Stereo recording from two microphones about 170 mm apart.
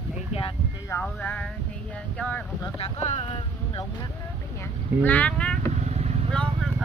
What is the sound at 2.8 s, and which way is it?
Boat, 35° left (ahead or behind).